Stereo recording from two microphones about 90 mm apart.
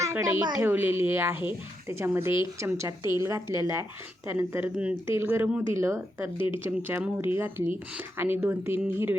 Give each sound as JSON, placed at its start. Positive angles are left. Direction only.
{"t": 0.0, "sound": "a woman's voice", "side_deg": -30}